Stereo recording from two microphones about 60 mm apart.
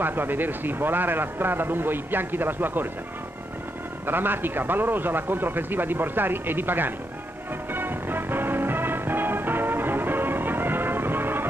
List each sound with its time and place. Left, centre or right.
0.0 s a man's voice: right
4.0 s a man's voice: right
7.7 s music: right